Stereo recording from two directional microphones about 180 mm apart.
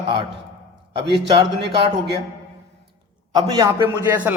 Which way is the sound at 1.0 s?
75° right (ahead or behind).